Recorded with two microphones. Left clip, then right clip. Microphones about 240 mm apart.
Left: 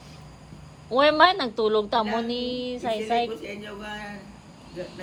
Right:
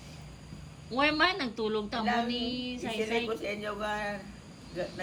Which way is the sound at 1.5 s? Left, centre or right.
Left.